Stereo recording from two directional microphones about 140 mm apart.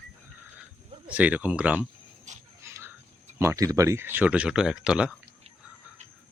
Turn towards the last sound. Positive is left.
turn(degrees=-5)  # may be behind; listen again after turning